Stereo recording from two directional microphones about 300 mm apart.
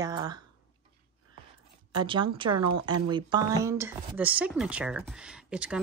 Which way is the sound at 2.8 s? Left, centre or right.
Centre.